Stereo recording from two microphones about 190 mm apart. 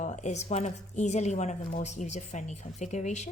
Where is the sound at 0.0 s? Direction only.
40° left (ahead or behind).